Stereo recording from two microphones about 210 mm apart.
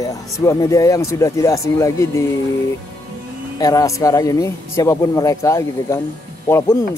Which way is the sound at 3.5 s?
15° left (ahead or behind).